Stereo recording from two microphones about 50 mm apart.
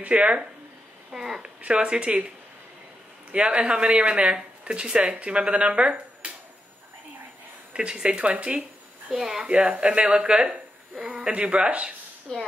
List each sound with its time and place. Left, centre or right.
0.0 s speech: right
1.1 s speech: centre
1.6 s speech: right
7.7 s speech: centre
9.1 s speech: centre
9.4 s speech: right
12.3 s speech: centre